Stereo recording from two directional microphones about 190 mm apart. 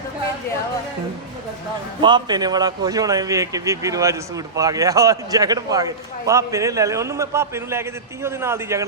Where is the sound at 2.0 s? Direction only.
20° right (ahead or behind).